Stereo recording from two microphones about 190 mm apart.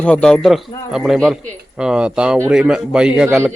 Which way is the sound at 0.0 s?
5° left (ahead or behind).